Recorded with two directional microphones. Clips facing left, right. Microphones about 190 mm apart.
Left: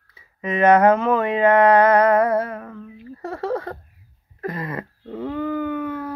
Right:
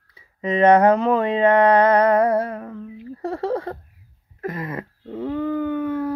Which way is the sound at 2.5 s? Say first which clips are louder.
Right 2 dB; 20° right (ahead or behind).